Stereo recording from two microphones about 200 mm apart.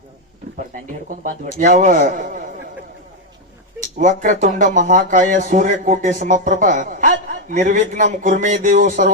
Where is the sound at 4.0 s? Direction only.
40° right (ahead or behind).